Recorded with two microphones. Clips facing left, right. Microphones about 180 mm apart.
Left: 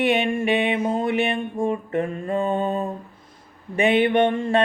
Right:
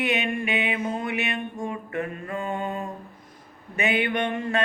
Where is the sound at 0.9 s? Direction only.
30° left (ahead or behind).